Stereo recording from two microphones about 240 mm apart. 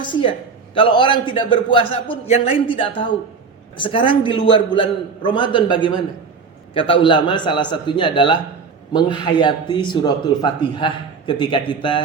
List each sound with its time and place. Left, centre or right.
0.1 s a man's voice: left